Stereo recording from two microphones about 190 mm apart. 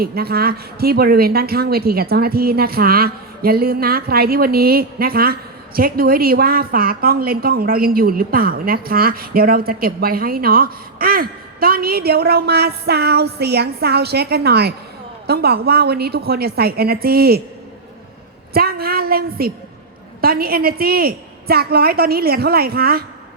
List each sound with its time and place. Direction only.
0.0 s a woman's voice: 55° right (ahead or behind)
18.5 s a woman's voice: 55° right (ahead or behind)